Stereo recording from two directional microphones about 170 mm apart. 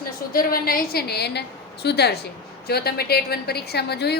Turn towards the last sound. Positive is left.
turn(degrees=75)  # may be behind; listen again after turning